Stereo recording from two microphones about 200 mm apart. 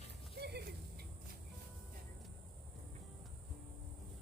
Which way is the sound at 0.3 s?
55° right (ahead or behind).